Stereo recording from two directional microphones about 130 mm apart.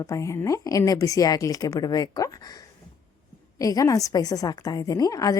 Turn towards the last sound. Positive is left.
turn(degrees=25)  # may be behind; listen again after turning